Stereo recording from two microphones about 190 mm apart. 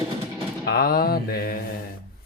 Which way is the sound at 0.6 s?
55° left (ahead or behind).